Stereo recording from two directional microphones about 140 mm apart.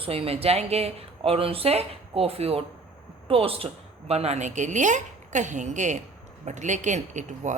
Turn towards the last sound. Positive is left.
turn(degrees=-60)  # may be behind; listen again after turning